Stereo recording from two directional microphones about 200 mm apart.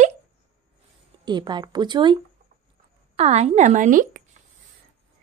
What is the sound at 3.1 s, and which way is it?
Speech, 30° right (ahead or behind).